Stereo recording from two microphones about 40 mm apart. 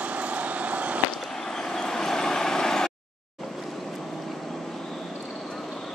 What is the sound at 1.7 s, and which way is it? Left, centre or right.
Vehicle, centre.